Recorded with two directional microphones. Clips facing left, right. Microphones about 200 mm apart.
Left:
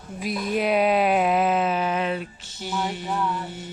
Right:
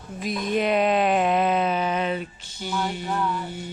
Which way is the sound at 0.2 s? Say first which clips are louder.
Right 1 dB; 5° left (ahead or behind).